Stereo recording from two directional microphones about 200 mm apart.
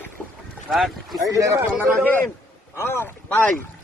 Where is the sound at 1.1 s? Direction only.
15° right (ahead or behind).